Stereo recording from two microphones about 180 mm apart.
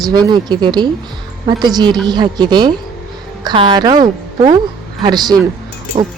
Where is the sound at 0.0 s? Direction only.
20° right (ahead or behind).